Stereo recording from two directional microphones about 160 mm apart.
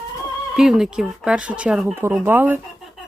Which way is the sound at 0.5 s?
Centre (ahead or behind).